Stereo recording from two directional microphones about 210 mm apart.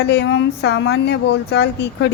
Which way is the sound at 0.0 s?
55° left (ahead or behind).